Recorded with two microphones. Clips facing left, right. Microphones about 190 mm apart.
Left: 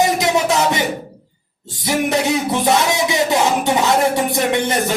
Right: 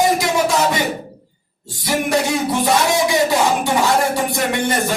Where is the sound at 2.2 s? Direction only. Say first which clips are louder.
Left 1 dB; 20° left (ahead or behind).